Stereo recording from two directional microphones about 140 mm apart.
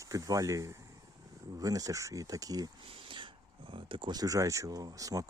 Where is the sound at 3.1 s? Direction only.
35° right (ahead or behind).